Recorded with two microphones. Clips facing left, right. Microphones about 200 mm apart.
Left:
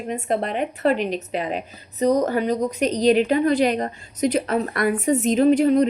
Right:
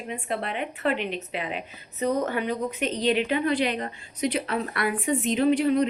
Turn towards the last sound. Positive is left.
turn(degrees=45)  # may be behind; listen again after turning